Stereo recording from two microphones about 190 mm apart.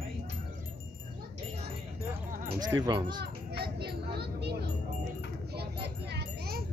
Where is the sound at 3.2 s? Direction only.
60° right (ahead or behind).